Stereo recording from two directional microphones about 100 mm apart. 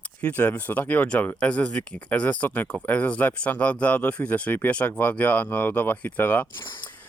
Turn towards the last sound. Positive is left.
turn(degrees=50)  # may be behind; listen again after turning